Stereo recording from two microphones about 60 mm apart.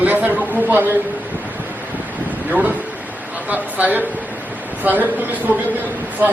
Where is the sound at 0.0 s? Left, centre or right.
Right.